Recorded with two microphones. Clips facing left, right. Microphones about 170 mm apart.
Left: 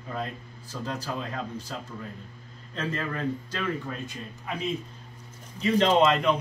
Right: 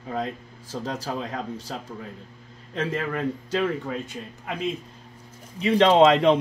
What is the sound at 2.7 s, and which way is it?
Speech, 90° right.